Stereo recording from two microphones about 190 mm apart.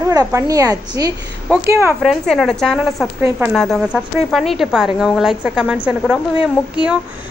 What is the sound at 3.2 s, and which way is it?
Speech, 10° right (ahead or behind).